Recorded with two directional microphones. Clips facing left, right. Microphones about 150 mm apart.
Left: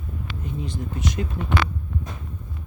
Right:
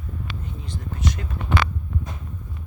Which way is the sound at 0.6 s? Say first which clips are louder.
Right 1 dB; 15° left (ahead or behind).